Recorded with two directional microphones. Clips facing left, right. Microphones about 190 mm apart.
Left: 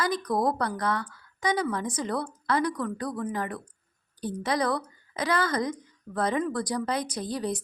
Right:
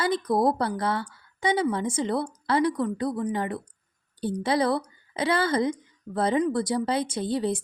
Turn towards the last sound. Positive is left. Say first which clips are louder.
# right 4 dB
turn(degrees=-25)  # may be behind; listen again after turning